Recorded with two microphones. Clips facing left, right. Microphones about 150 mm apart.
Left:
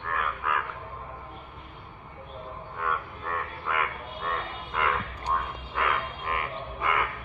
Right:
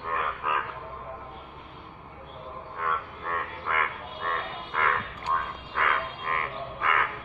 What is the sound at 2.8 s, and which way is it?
Frog, 5° left (ahead or behind).